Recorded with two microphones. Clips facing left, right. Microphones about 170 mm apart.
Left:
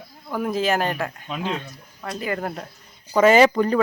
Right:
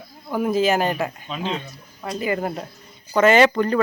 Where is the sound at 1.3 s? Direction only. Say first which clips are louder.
Even; 10° left (ahead or behind).